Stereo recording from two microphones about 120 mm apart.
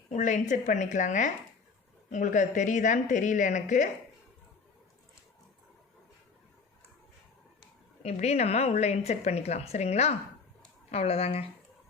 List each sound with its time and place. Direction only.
0.1 s speech: 90° left
8.0 s a woman's voice: 65° left (ahead or behind)